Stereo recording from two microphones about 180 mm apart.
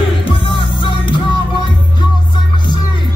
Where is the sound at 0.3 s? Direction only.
30° left (ahead or behind).